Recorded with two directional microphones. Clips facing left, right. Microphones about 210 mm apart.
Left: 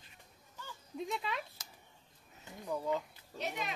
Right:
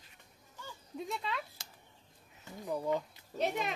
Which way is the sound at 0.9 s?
Centre (ahead or behind).